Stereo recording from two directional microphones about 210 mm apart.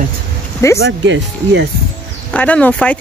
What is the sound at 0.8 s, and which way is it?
Speech, 60° right (ahead or behind).